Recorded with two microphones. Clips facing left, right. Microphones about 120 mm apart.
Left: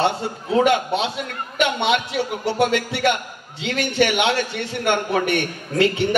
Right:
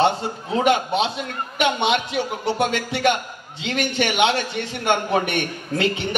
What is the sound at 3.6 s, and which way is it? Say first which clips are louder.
A man's voice: left 3 dB; 25° right (ahead or behind).